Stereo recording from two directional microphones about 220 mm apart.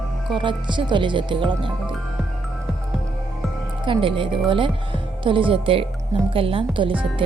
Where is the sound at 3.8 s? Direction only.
25° right (ahead or behind).